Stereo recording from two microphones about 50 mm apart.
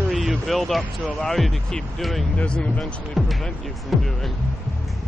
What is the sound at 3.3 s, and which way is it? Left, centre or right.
Speech, centre.